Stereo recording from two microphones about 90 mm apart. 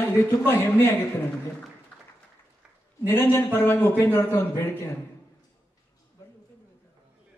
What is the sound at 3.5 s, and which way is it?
Speech, 25° left (ahead or behind).